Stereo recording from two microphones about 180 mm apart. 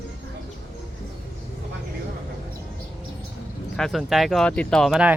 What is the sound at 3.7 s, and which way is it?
Speech, centre (ahead or behind).